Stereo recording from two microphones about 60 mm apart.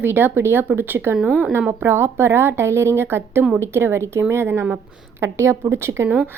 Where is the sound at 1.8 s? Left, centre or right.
Right.